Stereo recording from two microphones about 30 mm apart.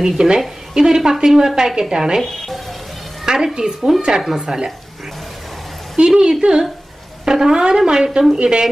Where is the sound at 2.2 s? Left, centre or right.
Centre.